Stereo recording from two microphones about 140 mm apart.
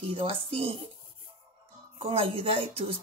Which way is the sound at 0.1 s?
40° right (ahead or behind).